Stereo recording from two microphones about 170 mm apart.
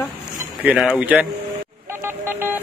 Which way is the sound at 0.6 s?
5° right (ahead or behind).